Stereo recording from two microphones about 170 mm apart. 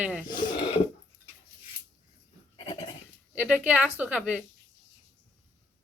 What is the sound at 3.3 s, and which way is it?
Speech, 5° right (ahead or behind).